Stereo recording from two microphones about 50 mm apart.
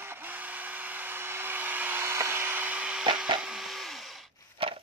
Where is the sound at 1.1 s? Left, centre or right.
Right.